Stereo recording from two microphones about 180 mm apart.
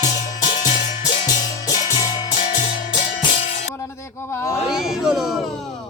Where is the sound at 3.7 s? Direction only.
15° left (ahead or behind).